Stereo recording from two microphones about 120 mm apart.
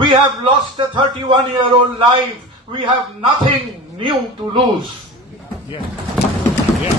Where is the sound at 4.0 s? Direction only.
45° right (ahead or behind).